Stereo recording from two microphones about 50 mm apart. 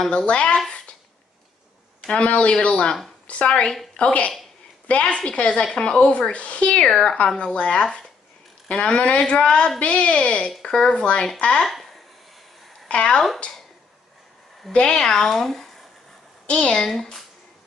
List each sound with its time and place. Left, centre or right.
0.3 s speech: left
2.0 s a woman's voice: left
6.9 s speech: centre
7.2 s speech: left
11.6 s a sound: centre
12.8 s speech: left
14.7 s speech: centre
16.4 s a woman's voice: left
16.7 s speech: centre